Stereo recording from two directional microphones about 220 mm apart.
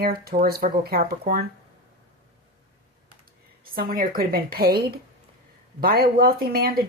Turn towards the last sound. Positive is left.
turn(degrees=-40)  # may be behind; listen again after turning